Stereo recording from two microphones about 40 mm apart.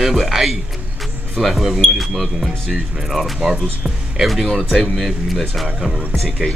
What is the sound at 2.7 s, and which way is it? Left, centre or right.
Speech, centre.